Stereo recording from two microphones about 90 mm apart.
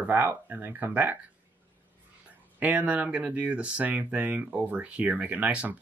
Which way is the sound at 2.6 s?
20° right (ahead or behind).